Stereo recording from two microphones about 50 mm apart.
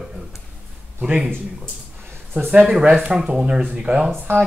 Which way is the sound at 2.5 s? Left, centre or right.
Centre.